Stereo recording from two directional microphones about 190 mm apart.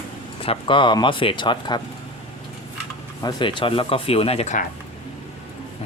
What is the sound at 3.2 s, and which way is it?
Speech, 25° left (ahead or behind).